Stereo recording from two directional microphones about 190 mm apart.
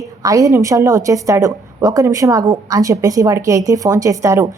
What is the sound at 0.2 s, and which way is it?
A woman's voice, 20° right (ahead or behind).